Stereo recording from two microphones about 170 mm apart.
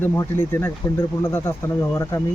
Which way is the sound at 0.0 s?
15° left (ahead or behind).